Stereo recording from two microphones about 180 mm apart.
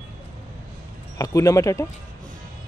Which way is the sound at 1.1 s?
20° left (ahead or behind).